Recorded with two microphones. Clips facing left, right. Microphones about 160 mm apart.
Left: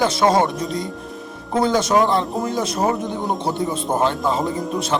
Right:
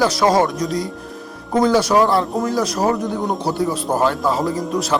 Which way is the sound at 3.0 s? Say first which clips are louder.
Right 2 dB; centre (ahead or behind).